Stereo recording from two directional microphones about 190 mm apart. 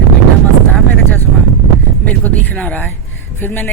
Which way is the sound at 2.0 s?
5° left (ahead or behind).